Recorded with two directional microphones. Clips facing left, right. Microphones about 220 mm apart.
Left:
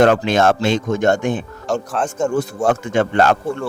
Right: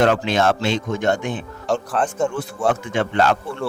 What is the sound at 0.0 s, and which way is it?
Speech, 45° left (ahead or behind).